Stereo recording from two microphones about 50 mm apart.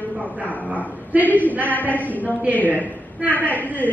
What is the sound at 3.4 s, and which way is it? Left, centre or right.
Speech, left.